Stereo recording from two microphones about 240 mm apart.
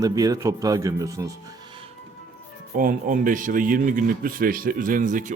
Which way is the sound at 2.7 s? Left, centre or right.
Right.